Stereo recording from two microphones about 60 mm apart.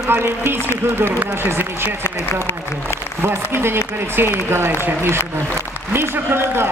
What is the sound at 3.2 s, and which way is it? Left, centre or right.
A man's voice, right.